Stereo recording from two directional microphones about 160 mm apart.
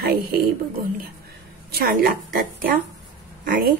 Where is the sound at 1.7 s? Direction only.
65° right (ahead or behind).